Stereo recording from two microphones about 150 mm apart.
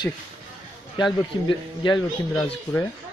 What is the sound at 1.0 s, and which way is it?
Speech, 30° left (ahead or behind).